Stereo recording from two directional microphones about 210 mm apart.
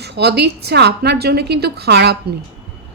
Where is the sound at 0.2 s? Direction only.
50° right (ahead or behind).